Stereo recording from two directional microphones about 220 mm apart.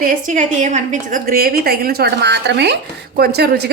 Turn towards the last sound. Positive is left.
turn(degrees=-45)  # may be behind; listen again after turning